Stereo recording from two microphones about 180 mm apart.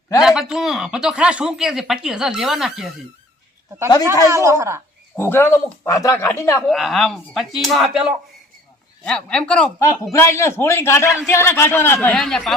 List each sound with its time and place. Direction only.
0.2 s speech: centre (ahead or behind)
4.2 s a woman's voice: 15° right (ahead or behind)
5.1 s speech: 15° left (ahead or behind)
6.7 s speech: centre (ahead or behind)
11.0 s speech: centre (ahead or behind)
11.3 s speech: 15° left (ahead or behind)
12.1 s speech: centre (ahead or behind)